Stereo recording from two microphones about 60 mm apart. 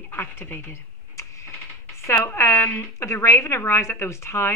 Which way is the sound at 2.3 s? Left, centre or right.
Left.